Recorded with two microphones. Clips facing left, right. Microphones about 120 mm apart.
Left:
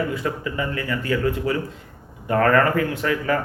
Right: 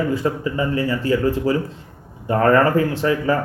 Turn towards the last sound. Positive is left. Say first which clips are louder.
# right 4 dB
turn(degrees=-30)  # may be behind; listen again after turning